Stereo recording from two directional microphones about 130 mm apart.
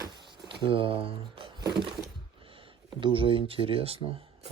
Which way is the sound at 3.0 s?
45° right (ahead or behind).